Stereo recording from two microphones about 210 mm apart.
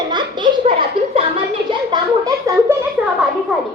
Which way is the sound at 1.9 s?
15° right (ahead or behind).